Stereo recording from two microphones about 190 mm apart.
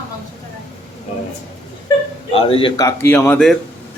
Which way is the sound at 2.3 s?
30° left (ahead or behind).